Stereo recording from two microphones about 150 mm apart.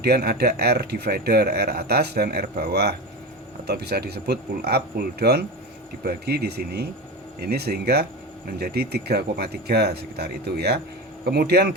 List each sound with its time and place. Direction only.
0.0 s speech: 90° right